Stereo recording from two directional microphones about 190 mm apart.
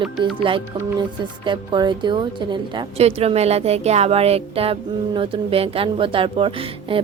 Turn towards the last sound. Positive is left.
turn(degrees=-30)  # may be behind; listen again after turning